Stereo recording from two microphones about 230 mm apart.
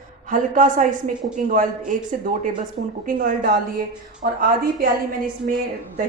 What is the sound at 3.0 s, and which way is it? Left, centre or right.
Speech, right.